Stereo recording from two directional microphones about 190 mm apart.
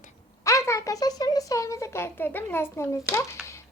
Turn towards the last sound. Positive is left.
turn(degrees=15)  # may be behind; listen again after turning